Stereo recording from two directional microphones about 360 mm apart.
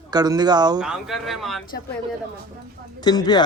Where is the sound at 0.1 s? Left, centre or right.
Centre.